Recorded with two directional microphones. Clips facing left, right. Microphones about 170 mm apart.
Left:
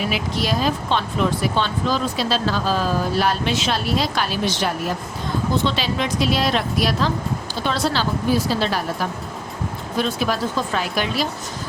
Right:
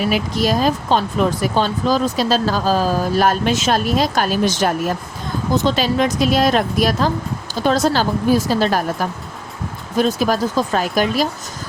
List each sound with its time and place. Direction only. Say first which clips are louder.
0.1 s speech: right 5 dB; 45° right (ahead or behind)